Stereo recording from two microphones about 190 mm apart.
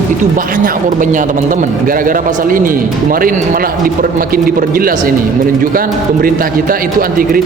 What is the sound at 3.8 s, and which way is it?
A man's voice, 50° right (ahead or behind).